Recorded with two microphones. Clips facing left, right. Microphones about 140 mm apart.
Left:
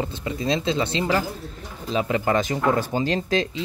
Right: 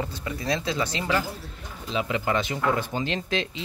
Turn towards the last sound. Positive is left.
turn(degrees=35)  # may be behind; listen again after turning